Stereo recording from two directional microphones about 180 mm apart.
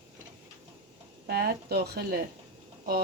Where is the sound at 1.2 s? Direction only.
60° right (ahead or behind).